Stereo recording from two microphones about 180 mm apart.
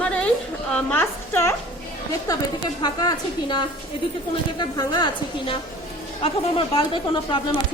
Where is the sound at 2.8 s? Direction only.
25° left (ahead or behind).